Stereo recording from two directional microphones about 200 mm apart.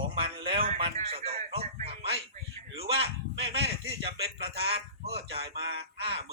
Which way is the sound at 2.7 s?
30° right (ahead or behind).